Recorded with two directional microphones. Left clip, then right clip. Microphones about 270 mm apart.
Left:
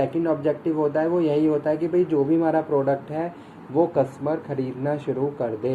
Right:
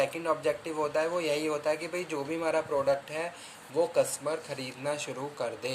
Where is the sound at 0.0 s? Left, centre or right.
Right.